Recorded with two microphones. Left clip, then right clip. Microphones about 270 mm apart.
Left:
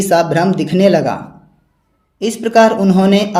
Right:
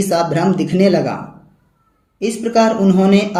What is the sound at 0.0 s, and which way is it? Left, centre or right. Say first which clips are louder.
Speech: left 3 dB; left.